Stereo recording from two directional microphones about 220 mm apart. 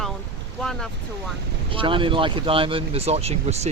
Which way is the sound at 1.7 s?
25° right (ahead or behind).